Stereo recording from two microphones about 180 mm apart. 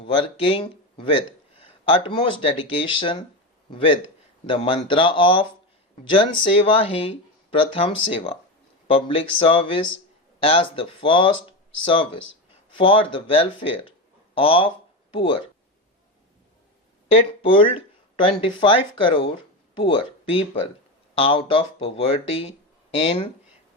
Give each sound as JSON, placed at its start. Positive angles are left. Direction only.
{"t": 0.0, "sound": "a man's voice", "side_deg": 30}
{"t": 17.1, "sound": "speech", "side_deg": 30}